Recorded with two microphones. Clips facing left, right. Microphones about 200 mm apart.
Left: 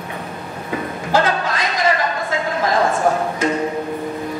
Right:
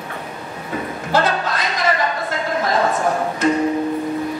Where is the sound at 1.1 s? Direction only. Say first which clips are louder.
Left 1 dB; 50° left (ahead or behind).